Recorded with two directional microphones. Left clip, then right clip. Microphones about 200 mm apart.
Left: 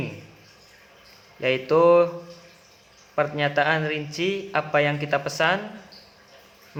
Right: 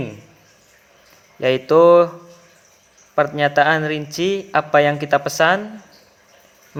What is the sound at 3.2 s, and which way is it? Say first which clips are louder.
A man's voice: right 7 dB; 45° right (ahead or behind).